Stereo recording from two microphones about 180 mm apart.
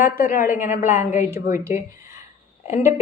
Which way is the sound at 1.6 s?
15° right (ahead or behind).